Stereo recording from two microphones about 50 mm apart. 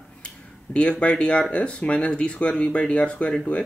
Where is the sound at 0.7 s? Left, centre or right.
Left.